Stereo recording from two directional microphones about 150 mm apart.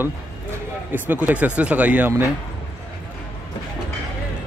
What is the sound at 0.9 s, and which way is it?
Speech, 10° right (ahead or behind).